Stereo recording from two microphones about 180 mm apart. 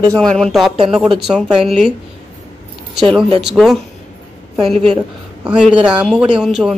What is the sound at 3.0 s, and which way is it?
Speech, centre (ahead or behind).